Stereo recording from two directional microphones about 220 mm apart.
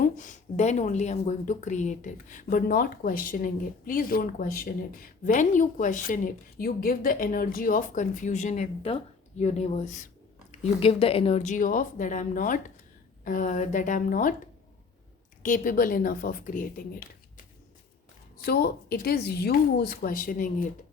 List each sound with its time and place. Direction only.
0.0 s speech: 35° left (ahead or behind)
15.4 s speech: 40° left (ahead or behind)
18.4 s speech: 45° left (ahead or behind)